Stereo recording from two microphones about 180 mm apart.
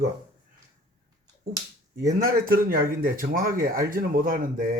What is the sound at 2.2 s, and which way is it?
Speech, 55° right (ahead or behind).